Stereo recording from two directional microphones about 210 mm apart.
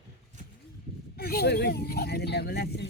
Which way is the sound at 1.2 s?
50° left (ahead or behind).